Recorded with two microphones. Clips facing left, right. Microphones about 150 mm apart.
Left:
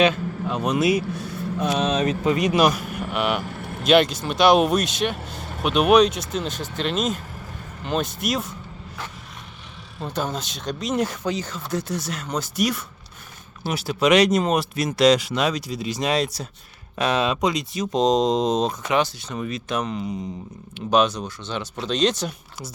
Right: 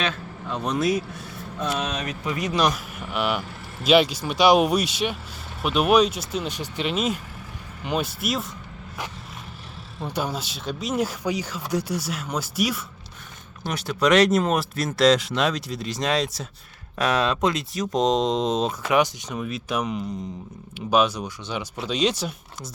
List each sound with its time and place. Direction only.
0.0 s speech: 15° left (ahead or behind)
1.5 s a sound: 15° left (ahead or behind)
2.4 s speech: 10° left (ahead or behind)
10.0 s speech: 10° right (ahead or behind)